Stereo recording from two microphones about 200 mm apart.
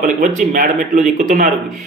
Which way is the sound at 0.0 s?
40° right (ahead or behind).